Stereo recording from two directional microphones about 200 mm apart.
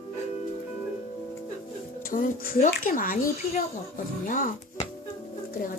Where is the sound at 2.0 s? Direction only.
45° left (ahead or behind).